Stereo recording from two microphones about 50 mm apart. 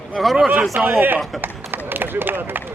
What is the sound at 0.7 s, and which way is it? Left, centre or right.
A man's voice, right.